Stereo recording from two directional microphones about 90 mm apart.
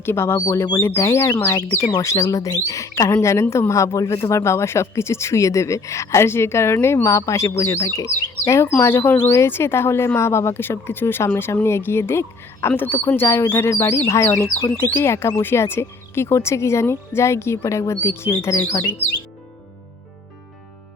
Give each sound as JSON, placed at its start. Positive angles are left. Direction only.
{"t": 0.0, "sound": "speech", "side_deg": 25}
{"t": 14.8, "sound": "speech", "side_deg": 25}